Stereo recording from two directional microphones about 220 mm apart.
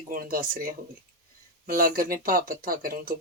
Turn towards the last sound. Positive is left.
turn(degrees=-40)  # may be behind; listen again after turning